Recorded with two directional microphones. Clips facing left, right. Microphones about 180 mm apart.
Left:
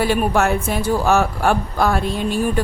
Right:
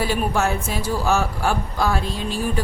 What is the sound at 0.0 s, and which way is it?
A woman's voice, 60° left (ahead or behind).